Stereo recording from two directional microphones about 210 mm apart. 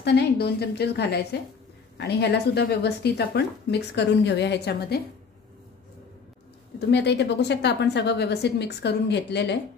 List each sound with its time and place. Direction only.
0.0 s a woman's voice: 50° left (ahead or behind)
6.9 s a woman's voice: 55° left (ahead or behind)